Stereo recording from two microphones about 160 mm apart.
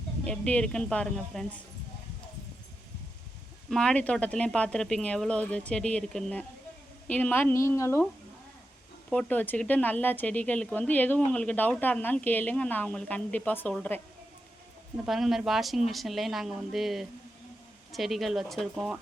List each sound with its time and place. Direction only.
0.3 s speech: 5° left (ahead or behind)
3.7 s speech: 5° left (ahead or behind)
9.0 s speech: 10° left (ahead or behind)
15.0 s speech: centre (ahead or behind)